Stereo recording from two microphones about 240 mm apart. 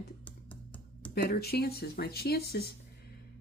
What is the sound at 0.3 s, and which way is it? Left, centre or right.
Computer keyboard, centre.